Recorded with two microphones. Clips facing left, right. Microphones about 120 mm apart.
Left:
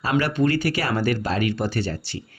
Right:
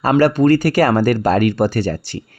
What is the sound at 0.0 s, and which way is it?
Speech, 45° right (ahead or behind).